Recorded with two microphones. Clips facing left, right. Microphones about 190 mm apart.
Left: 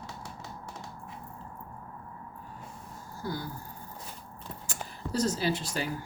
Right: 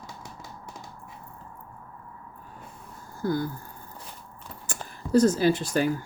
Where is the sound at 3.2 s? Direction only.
50° right (ahead or behind).